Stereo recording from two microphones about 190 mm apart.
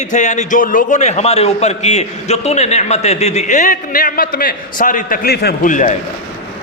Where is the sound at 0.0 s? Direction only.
40° left (ahead or behind).